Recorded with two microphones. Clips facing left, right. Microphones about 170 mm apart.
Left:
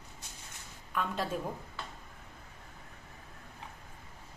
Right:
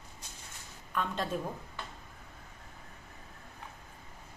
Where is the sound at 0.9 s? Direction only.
5° left (ahead or behind).